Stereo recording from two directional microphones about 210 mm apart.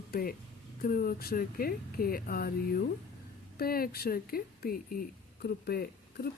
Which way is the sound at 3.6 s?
45° left (ahead or behind).